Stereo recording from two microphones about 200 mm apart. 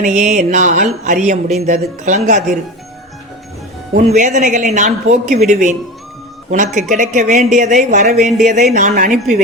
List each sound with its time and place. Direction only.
0.0 s a man's voice: 35° right (ahead or behind)
3.9 s a man's voice: 35° right (ahead or behind)